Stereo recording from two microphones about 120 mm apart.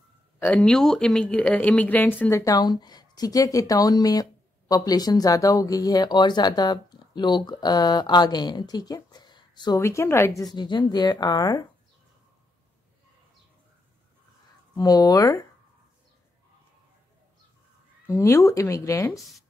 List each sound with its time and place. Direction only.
0.6 s speech: 5° left (ahead or behind); by 9.8 s 40° left (ahead or behind)
9.8 s speech: 25° left (ahead or behind)
10.5 s speech: 40° left (ahead or behind)
14.8 s speech: 35° left (ahead or behind)
18.0 s speech: 25° left (ahead or behind)
19.1 s speech: centre (ahead or behind)